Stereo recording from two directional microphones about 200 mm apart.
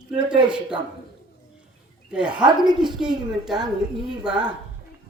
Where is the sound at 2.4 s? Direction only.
20° right (ahead or behind).